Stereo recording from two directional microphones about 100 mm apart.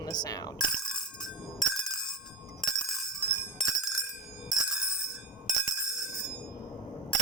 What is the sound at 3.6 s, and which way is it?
Bicycle bell, centre (ahead or behind).